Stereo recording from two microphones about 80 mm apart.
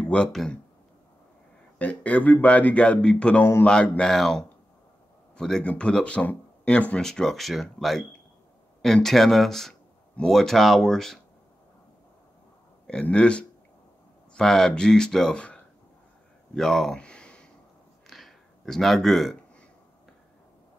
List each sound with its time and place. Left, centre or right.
0.0 s speech: centre
1.8 s speech: centre
13.0 s speech: centre
18.0 s a sound: centre